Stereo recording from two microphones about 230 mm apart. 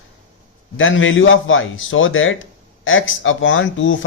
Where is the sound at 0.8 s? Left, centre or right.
Left.